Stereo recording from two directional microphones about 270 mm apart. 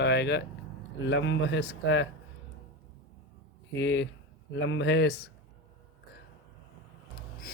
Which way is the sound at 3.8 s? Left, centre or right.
Left.